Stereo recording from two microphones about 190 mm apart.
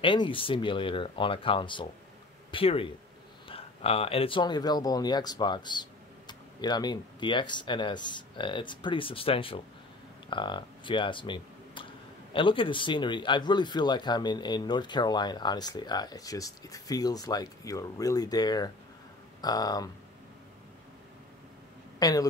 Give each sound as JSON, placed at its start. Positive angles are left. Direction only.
{"t": 0.0, "sound": "speech", "side_deg": 25}
{"t": 22.0, "sound": "speech", "side_deg": 20}